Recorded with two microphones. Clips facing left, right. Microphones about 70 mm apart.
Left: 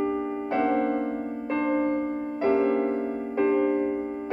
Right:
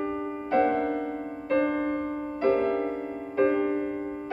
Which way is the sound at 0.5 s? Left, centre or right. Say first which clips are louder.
Right 1 dB; centre.